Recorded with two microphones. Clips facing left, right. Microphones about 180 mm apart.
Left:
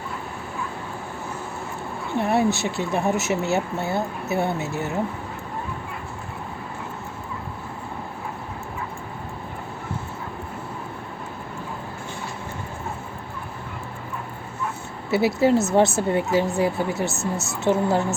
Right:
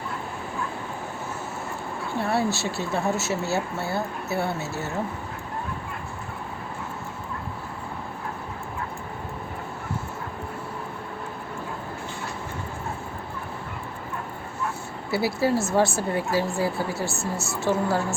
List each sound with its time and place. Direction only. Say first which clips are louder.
2.1 s speech: left 4 dB; 20° left (ahead or behind)
15.1 s a woman's voice: left 5 dB; 20° left (ahead or behind)